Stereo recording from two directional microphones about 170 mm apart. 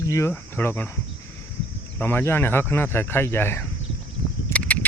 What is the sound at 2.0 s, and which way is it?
Speech, 10° left (ahead or behind).